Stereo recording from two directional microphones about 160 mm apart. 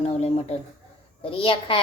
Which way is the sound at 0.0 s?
40° left (ahead or behind).